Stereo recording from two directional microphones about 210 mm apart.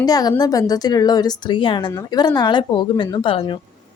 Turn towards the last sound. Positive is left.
turn(degrees=25)  # may be behind; listen again after turning